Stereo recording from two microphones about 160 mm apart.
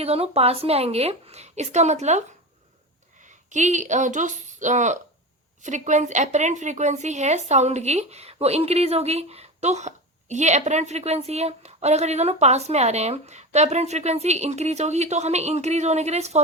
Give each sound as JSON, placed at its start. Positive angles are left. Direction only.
{"t": 0.0, "sound": "a woman's voice", "side_deg": -40}
{"t": 3.2, "sound": "a woman's voice", "side_deg": -50}